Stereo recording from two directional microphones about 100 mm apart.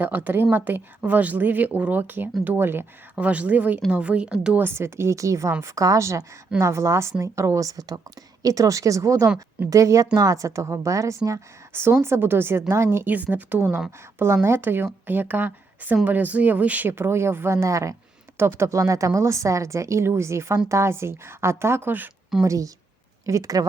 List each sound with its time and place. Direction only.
0.0 s a woman's voice: 20° right (ahead or behind)
4.6 s a woman's voice: 25° right (ahead or behind)
22.4 s a woman's voice: 35° right (ahead or behind)